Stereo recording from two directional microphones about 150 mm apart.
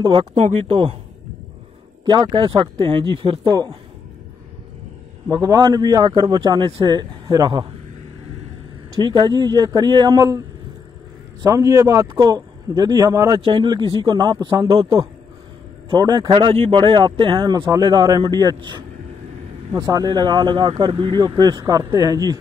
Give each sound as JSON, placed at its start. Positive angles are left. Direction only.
{"t": 0.0, "sound": "speech", "side_deg": -30}
{"t": 0.3, "sound": "speech", "side_deg": -50}
{"t": 2.0, "sound": "speech", "side_deg": -30}
{"t": 3.4, "sound": "speech", "side_deg": -25}
{"t": 5.3, "sound": "speech", "side_deg": -25}
{"t": 9.0, "sound": "speech", "side_deg": -30}
{"t": 11.4, "sound": "speech", "side_deg": -25}
{"t": 13.4, "sound": "speech", "side_deg": -30}
{"t": 15.9, "sound": "speech", "side_deg": -30}